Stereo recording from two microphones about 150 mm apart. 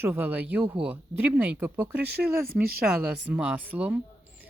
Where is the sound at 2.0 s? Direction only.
85° right.